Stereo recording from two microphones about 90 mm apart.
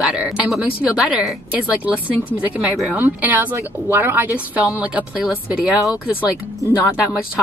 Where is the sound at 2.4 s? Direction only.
20° right (ahead or behind).